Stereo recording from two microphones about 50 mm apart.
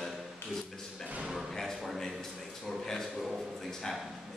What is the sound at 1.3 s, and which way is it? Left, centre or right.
A man's voice, centre.